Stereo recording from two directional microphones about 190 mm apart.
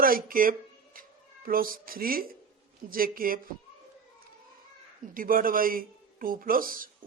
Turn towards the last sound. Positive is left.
turn(degrees=-50)  # may be behind; listen again after turning